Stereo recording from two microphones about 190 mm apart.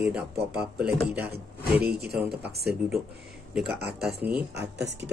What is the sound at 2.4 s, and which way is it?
Speech, 60° right (ahead or behind).